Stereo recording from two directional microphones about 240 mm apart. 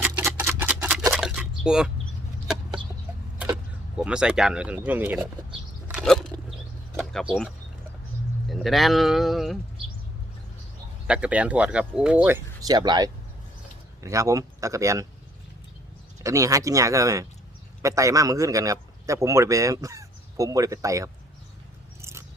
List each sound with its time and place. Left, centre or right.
0.0 s a sound: centre
3.9 s speech: centre
5.9 s a sound: centre
6.9 s speech: centre
11.0 s a man's voice: centre
16.2 s a man's voice: centre